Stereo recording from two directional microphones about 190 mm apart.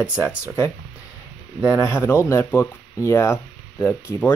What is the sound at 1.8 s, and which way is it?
Speech, 15° left (ahead or behind).